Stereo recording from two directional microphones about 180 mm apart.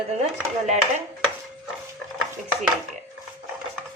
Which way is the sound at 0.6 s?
40° right (ahead or behind).